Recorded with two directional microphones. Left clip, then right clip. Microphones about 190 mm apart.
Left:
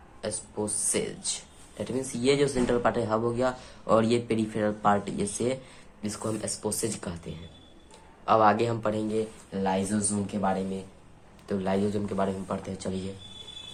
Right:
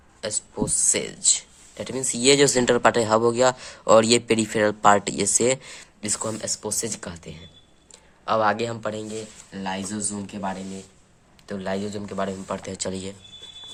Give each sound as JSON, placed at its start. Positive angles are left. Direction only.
{"t": 0.2, "sound": "speech", "side_deg": -35}